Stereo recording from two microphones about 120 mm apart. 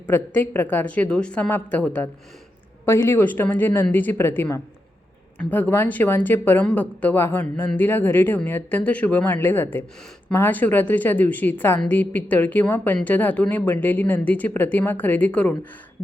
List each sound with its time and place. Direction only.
0.1 s speech: 15° left (ahead or behind)